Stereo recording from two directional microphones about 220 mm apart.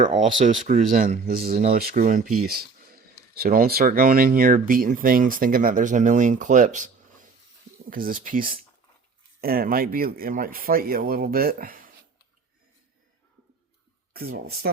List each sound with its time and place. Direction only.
0.1 s speech: 35° right (ahead or behind)
14.1 s speech: 45° right (ahead or behind)